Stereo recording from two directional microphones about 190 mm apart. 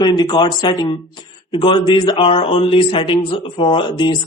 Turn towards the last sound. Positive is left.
turn(degrees=25)  # may be behind; listen again after turning